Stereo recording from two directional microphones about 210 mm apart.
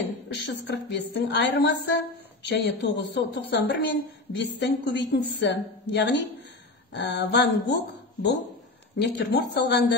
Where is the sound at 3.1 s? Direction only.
55° left (ahead or behind).